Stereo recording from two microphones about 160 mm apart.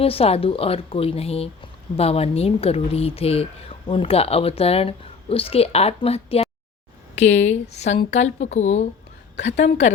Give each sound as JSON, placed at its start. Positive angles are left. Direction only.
{"t": 0.0, "sound": "speech", "side_deg": 35}